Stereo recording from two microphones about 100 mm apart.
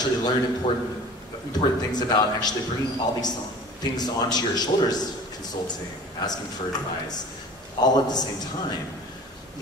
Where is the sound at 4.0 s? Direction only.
45° left (ahead or behind).